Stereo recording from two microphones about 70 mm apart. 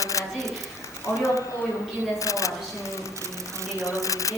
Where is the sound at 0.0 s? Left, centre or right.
Left.